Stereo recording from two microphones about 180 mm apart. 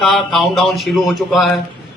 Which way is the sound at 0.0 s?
Centre (ahead or behind).